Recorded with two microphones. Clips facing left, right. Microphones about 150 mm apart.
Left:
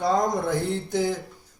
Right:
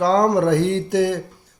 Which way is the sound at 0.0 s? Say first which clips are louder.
Right 7 dB; 90° right.